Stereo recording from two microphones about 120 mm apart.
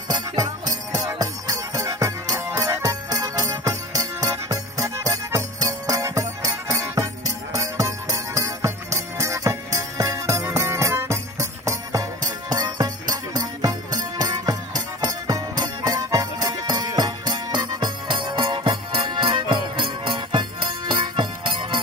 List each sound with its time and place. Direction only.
0.4 s music: 30° right (ahead or behind)